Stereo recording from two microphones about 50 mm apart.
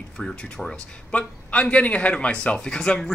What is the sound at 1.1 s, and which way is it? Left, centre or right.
Speech, left.